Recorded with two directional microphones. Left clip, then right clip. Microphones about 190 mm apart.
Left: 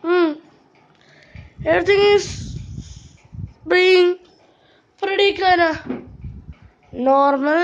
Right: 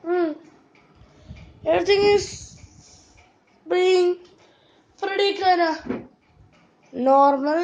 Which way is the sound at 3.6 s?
30° left (ahead or behind).